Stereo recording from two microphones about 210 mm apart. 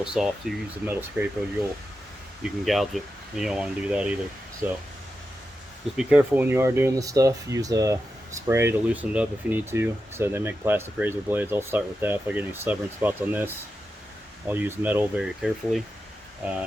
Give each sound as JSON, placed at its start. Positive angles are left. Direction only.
{"t": 0.0, "sound": "speech", "side_deg": -5}
{"t": 2.4, "sound": "speech", "side_deg": 0}
{"t": 6.0, "sound": "speech", "side_deg": -5}